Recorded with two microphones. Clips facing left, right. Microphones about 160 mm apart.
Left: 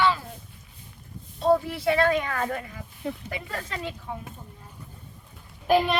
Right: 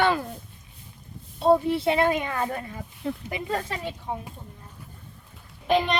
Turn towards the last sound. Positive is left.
turn(degrees=5)  # may be behind; listen again after turning